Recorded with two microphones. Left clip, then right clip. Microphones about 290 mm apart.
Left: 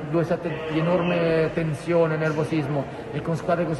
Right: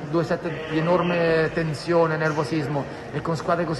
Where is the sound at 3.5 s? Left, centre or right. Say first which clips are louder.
Even; centre.